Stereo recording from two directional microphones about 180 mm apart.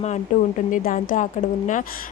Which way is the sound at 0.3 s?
45° left (ahead or behind).